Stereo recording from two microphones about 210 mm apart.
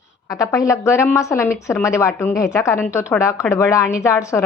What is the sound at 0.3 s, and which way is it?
A woman's voice, 15° left (ahead or behind).